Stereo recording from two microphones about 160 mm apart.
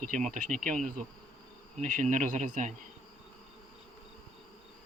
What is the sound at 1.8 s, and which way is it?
Speech, 50° right (ahead or behind).